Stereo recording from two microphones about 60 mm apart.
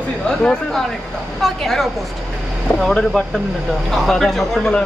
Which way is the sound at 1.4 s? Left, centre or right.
Centre.